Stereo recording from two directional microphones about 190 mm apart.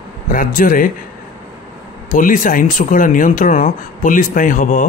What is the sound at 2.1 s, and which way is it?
Speech, 45° left (ahead or behind).